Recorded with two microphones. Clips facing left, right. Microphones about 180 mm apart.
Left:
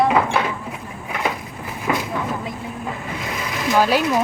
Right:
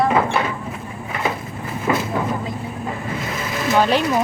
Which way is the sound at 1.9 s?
5° left (ahead or behind).